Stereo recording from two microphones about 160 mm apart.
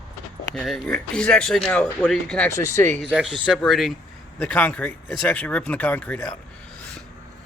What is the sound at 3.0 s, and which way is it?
Speech, 5° right (ahead or behind).